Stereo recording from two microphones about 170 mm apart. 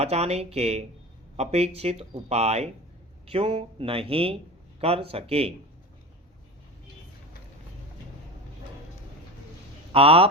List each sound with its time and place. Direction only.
0.0 s speech: 40° right (ahead or behind)
9.9 s speech: 35° right (ahead or behind)